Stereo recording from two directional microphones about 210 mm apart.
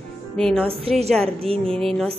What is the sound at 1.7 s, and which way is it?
Speech, 5° left (ahead or behind).